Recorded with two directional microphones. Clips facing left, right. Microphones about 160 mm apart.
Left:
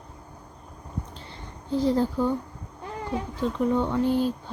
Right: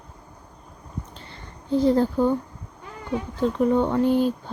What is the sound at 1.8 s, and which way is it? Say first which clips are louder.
Speech: right 4 dB; 50° right (ahead or behind).